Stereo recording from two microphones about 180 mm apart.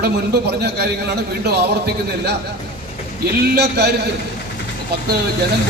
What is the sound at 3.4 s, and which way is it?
Speech, 65° right (ahead or behind).